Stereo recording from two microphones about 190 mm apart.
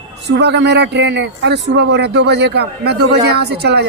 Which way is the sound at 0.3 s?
65° right (ahead or behind).